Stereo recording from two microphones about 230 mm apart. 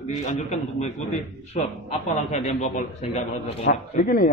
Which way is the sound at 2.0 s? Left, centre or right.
Left.